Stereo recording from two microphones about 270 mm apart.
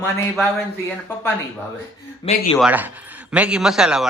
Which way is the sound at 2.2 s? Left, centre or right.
Centre.